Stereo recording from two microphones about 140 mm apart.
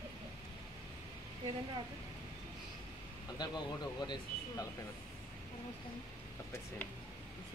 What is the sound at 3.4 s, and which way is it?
Speech, 30° left (ahead or behind).